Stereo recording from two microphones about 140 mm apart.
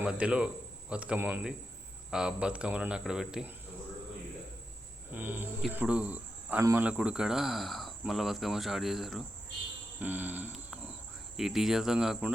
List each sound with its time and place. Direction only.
0.0 s a man's voice: 10° right (ahead or behind)
5.1 s cricket: 15° right (ahead or behind)
5.7 s speech: 10° right (ahead or behind)
6.6 s speech: 20° right (ahead or behind)
6.8 s speech: 10° right (ahead or behind)
10.0 s cricket: 10° right (ahead or behind)
11.3 s speech: centre (ahead or behind)